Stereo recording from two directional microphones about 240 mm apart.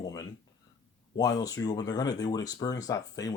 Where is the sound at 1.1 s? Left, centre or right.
Centre.